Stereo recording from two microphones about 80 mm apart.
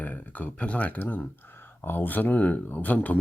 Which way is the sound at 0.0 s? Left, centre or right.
Centre.